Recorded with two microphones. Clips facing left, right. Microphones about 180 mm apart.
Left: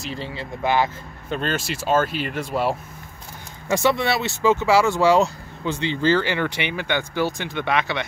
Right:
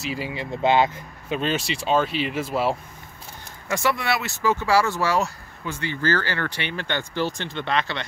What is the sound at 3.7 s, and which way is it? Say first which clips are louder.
Speech: left 4 dB; 25° left (ahead or behind).